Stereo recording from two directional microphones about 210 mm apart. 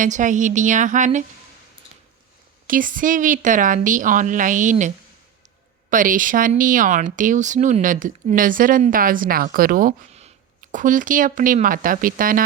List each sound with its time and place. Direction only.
0.0 s speech: 35° right (ahead or behind)
2.6 s speech: 40° right (ahead or behind)
5.9 s speech: 40° right (ahead or behind)